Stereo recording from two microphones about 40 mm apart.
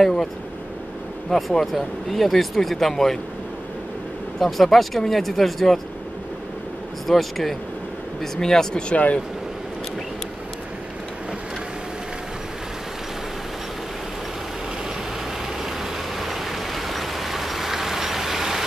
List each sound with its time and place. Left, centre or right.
0.0 s speech: centre
1.3 s speech: centre
4.4 s speech: centre
7.1 s speech: centre
8.8 s speech: left
15.6 s vehicle: centre